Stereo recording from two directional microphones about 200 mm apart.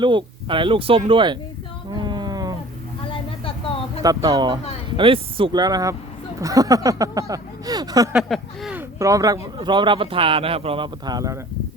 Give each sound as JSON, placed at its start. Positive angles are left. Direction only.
{"t": 0.0, "sound": "a man's voice", "side_deg": -25}
{"t": 1.9, "sound": "a sound", "side_deg": -20}
{"t": 3.1, "sound": "vehicle", "side_deg": 25}
{"t": 4.0, "sound": "a man's voice", "side_deg": -20}
{"t": 8.1, "sound": "speech", "side_deg": 0}
{"t": 9.0, "sound": "a man's voice", "side_deg": -15}